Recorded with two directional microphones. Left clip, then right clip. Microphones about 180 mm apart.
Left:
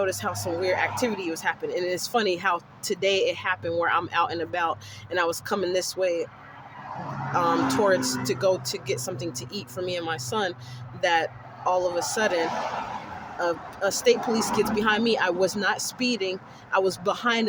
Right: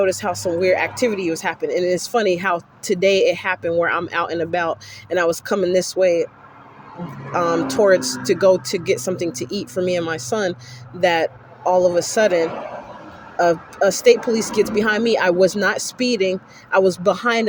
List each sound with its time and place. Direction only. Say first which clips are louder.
0.0 s speech: right 8 dB; 25° right (ahead or behind)
7.3 s speech: right 5 dB; 25° right (ahead or behind)